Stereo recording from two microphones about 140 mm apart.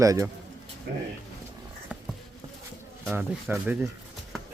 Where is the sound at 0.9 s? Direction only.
90° right.